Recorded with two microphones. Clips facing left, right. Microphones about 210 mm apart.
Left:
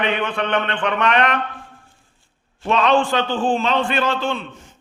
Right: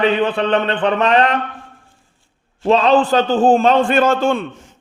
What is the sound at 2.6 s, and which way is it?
A man's voice, 35° right (ahead or behind).